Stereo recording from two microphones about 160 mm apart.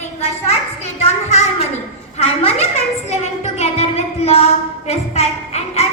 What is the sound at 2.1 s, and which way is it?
A woman's voice, 40° left (ahead or behind).